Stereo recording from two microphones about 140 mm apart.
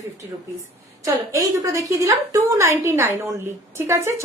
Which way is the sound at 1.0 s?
20° right (ahead or behind).